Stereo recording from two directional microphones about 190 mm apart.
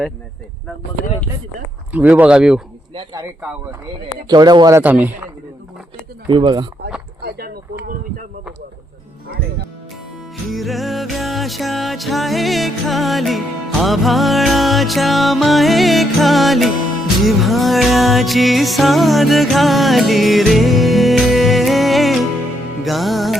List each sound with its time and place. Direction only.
1.9 s speech: 10° right (ahead or behind)
2.9 s speech: 25° right (ahead or behind)
4.3 s speech: 20° right (ahead or behind)
4.8 s speech: 10° right (ahead or behind)
6.2 s speech: 25° right (ahead or behind)
7.2 s speech: 55° right (ahead or behind)
10.5 s music: centre (ahead or behind)